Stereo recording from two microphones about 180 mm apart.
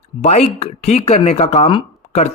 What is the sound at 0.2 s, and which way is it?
Speech, 40° left (ahead or behind).